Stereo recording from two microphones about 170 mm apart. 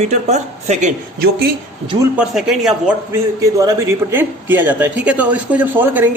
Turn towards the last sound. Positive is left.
turn(degrees=-10)  # may be behind; listen again after turning